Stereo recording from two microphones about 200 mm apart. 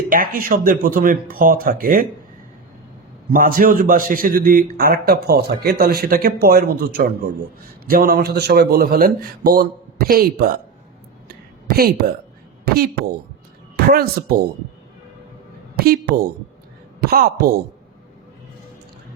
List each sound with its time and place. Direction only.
0.1 s a man's voice: 45° right (ahead or behind)
3.2 s a man's voice: 45° right (ahead or behind)
11.7 s a man's voice: 50° right (ahead or behind)
13.7 s a woman's voice: 50° right (ahead or behind)
15.8 s a woman's voice: 50° right (ahead or behind)